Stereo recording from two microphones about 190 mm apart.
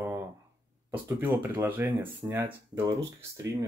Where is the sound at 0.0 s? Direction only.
15° right (ahead or behind).